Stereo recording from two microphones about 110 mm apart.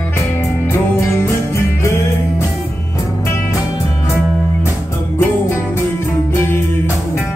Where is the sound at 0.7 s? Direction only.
20° left (ahead or behind).